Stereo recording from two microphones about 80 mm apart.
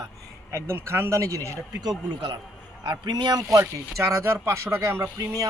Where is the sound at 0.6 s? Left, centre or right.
Right.